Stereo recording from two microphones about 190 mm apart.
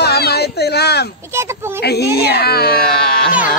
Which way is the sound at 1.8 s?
60° left (ahead or behind).